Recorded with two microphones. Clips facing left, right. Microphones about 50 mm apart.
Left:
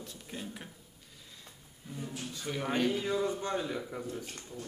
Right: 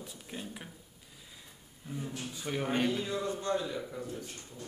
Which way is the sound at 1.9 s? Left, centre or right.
Centre.